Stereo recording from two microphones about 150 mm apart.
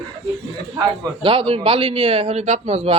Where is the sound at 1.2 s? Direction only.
35° right (ahead or behind).